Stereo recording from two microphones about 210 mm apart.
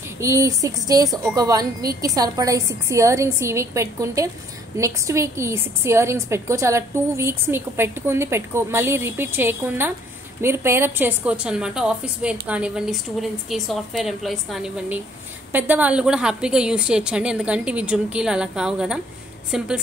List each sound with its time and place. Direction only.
0.2 s a woman's voice: 15° right (ahead or behind)